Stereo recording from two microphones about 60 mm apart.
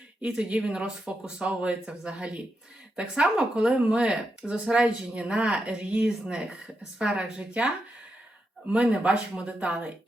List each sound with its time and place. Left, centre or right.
0.2 s speech: centre
8.7 s speech: right